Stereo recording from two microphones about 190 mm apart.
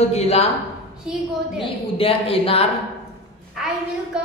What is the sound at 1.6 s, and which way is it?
A woman's voice, 30° left (ahead or behind).